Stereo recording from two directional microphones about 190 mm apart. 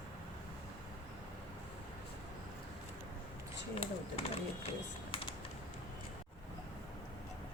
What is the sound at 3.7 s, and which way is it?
Speech, 30° left (ahead or behind).